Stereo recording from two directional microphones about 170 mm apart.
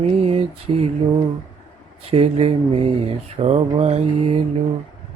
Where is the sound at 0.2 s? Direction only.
35° right (ahead or behind).